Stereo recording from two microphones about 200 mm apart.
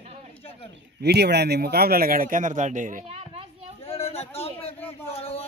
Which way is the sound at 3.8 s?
30° left (ahead or behind).